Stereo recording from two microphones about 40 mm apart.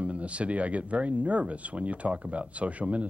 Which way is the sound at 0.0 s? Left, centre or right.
Right.